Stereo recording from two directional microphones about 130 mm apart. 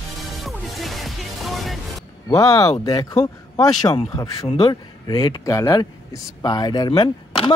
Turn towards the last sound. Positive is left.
turn(degrees=35)  # may be behind; listen again after turning